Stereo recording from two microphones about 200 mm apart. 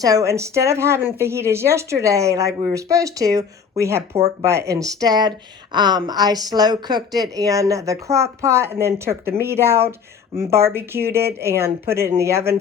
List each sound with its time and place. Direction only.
0.0 s speech: 15° right (ahead or behind)